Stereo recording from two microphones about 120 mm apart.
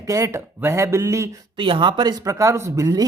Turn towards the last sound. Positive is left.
turn(degrees=-25)  # may be behind; listen again after turning